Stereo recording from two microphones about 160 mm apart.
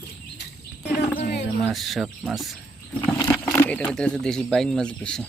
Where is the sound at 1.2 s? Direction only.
85° left.